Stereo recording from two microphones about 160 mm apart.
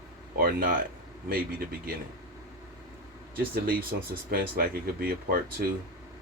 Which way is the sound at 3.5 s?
70° right (ahead or behind).